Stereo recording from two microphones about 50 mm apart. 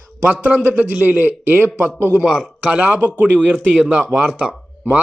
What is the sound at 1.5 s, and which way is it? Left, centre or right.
Speech, right.